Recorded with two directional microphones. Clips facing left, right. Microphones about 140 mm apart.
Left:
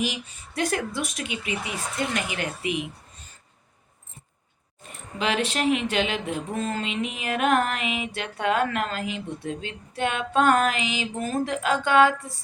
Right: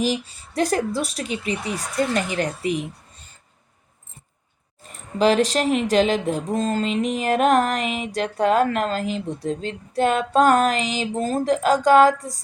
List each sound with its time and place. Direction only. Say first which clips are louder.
0.0 s speech: right 6 dB; 35° right (ahead or behind)
4.8 s speech: right 10 dB; 40° right (ahead or behind)